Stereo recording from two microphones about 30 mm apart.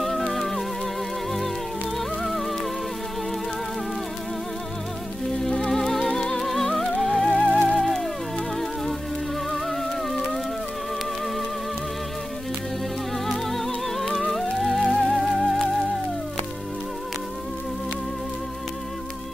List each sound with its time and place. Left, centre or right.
0.3 s music: centre
2.0 s music: centre
5.7 s music: centre
6.4 s music: centre
7.4 s music: left
7.8 s music: centre
9.5 s music: centre
13.3 s music: centre